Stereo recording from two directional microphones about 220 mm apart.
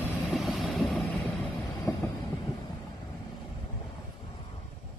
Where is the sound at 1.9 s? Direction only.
10° left (ahead or behind).